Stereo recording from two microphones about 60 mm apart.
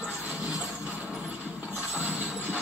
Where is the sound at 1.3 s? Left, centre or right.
Right.